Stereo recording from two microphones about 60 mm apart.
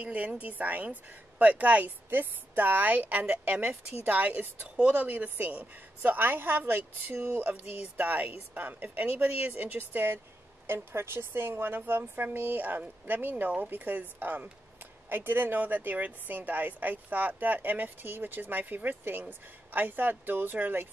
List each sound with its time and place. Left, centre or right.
0.0 s a woman's voice: right